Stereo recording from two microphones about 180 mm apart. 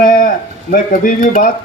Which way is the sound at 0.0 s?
50° left (ahead or behind).